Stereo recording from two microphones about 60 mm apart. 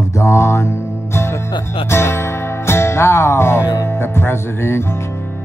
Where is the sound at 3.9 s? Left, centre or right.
Left.